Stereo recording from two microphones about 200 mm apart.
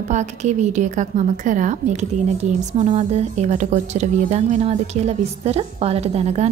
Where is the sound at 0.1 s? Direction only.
35° right (ahead or behind).